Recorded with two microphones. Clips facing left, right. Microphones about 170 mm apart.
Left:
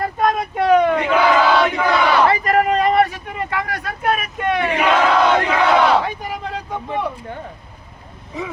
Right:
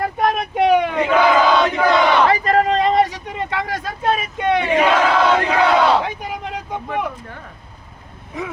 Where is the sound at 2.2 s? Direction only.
25° right (ahead or behind).